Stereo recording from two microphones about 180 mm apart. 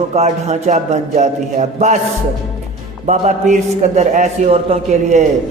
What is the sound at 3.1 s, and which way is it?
A man's voice, 40° right (ahead or behind).